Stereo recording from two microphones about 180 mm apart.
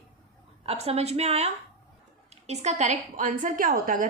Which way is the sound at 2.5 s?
40° right (ahead or behind).